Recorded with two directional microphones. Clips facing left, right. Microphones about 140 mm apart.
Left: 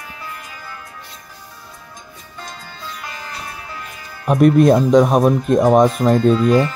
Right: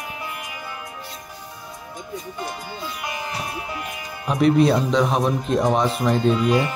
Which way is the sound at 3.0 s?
15° right (ahead or behind).